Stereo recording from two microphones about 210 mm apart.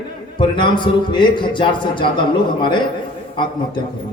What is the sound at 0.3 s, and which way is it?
A man's voice, 20° left (ahead or behind).